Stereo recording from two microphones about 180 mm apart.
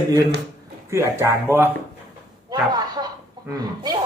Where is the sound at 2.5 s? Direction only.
20° right (ahead or behind).